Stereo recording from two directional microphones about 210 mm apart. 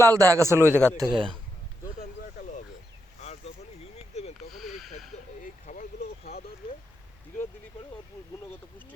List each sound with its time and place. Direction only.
0.0 s a man's voice: 15° right (ahead or behind)
0.7 s speech: 10° left (ahead or behind)
0.9 s a man's voice: 20° right (ahead or behind)
3.2 s a sound: 30° left (ahead or behind)
4.5 s a sound: centre (ahead or behind)
5.4 s vehicle: 35° left (ahead or behind)